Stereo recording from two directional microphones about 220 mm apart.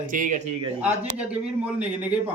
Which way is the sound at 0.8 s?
5° right (ahead or behind).